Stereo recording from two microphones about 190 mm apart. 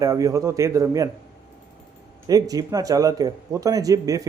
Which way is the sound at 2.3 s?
20° right (ahead or behind).